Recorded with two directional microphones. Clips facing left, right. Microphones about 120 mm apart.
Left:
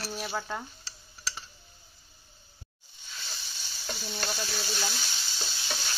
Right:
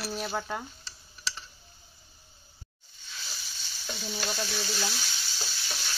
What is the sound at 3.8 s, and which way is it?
Stir, centre (ahead or behind).